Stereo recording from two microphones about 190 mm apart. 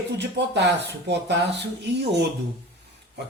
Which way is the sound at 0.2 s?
65° right (ahead or behind).